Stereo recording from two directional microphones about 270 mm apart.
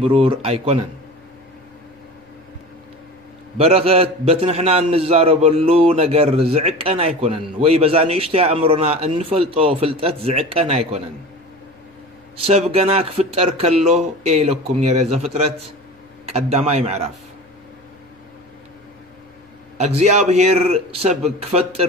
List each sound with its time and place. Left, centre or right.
0.0 s a man's voice: centre
3.5 s a man's voice: right
12.4 s a man's voice: right
16.3 s a man's voice: right
19.8 s a man's voice: right